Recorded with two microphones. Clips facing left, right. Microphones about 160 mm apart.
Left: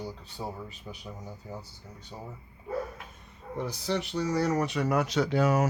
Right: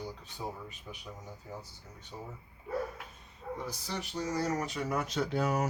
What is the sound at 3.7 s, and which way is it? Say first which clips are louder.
Speech: left 8 dB; 70° left (ahead or behind).